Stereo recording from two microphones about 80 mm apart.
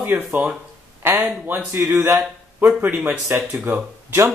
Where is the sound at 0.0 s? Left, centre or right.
Centre.